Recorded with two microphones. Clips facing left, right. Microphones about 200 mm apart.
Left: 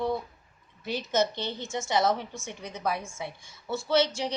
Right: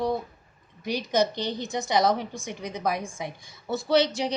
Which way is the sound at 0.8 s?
15° right (ahead or behind).